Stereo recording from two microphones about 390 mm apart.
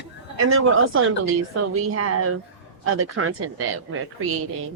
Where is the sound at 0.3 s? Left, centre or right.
Right.